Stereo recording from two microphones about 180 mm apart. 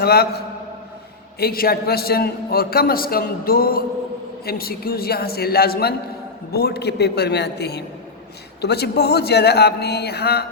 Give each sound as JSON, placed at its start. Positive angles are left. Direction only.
{"t": 0.0, "sound": "a man's voice", "side_deg": 60}